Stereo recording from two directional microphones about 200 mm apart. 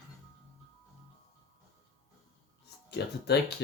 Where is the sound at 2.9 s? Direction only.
55° left (ahead or behind).